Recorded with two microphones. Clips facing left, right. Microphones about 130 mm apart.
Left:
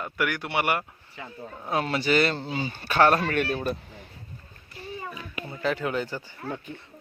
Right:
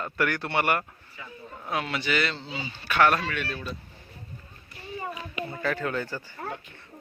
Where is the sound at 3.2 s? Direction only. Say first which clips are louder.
Left 6 dB; 50° left (ahead or behind).